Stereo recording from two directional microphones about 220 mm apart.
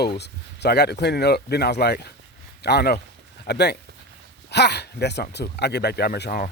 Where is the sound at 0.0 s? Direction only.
50° left (ahead or behind).